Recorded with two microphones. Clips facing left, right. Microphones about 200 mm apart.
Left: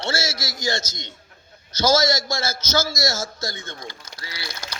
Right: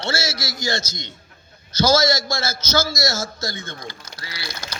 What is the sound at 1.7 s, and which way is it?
Speech, 20° left (ahead or behind).